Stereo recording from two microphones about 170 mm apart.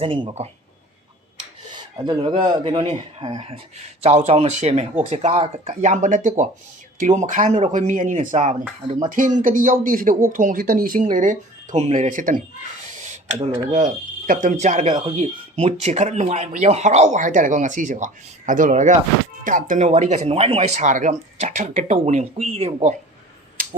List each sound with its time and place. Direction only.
0.0 s speech: 30° right (ahead or behind)
1.7 s speech: 30° right (ahead or behind); by 12.4 s 50° right (ahead or behind)
12.8 s a sound: 45° right (ahead or behind)
13.7 s speech: 45° right (ahead or behind)